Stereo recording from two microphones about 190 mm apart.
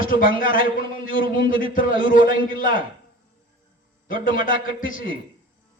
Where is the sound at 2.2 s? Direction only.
25° right (ahead or behind).